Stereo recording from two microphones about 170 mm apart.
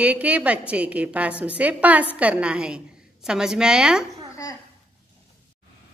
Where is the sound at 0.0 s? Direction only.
10° right (ahead or behind).